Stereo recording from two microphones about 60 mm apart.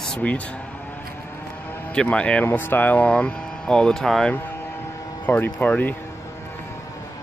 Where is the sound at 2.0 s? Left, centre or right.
Centre.